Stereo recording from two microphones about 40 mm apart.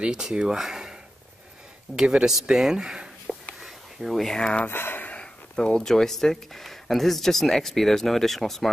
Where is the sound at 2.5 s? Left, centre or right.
Centre.